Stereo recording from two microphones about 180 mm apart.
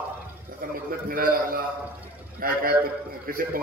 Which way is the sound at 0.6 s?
50° right (ahead or behind).